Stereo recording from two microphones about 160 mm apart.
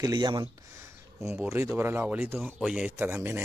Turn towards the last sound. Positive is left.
turn(degrees=-15)  # may be behind; listen again after turning